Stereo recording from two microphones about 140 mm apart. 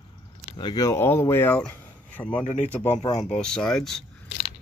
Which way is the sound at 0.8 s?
20° left (ahead or behind).